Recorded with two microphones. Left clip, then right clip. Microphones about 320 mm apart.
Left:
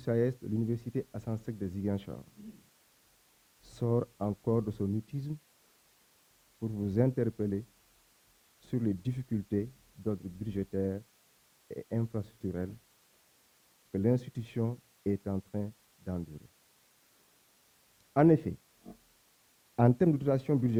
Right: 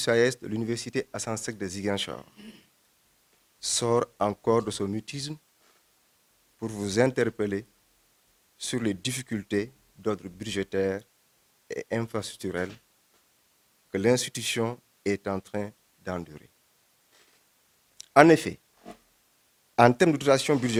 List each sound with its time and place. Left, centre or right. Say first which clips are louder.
0.0 s speech: right 8 dB; centre
3.6 s speech: right 8 dB; centre
6.6 s speech: right 5 dB; centre
6.8 s speech: right 7 dB; centre
8.6 s speech: right 6 dB; centre
13.9 s speech: right 8 dB; centre
18.1 s a sound: right 8 dB; centre
19.7 s speech: right 8 dB; centre